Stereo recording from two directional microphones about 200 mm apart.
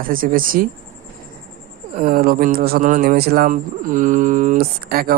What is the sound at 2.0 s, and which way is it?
Speech, 45° right (ahead or behind).